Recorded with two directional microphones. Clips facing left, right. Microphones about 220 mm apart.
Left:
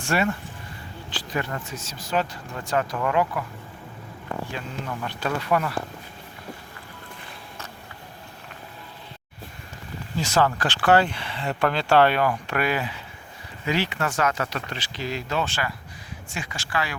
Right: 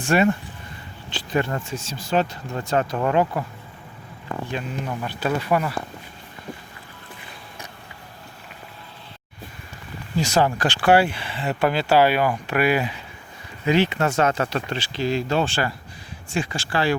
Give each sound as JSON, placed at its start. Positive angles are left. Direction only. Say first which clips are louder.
{"t": 0.0, "sound": "speech", "louder": "right 5 dB", "side_deg": -20}
{"t": 4.5, "sound": "speech", "louder": "right 4 dB", "side_deg": -20}
{"t": 5.0, "sound": "speech", "louder": "right 3 dB", "side_deg": -5}
{"t": 10.2, "sound": "speech", "louder": "right 2 dB", "side_deg": -15}
{"t": 13.7, "sound": "speech", "louder": "right 6 dB", "side_deg": -20}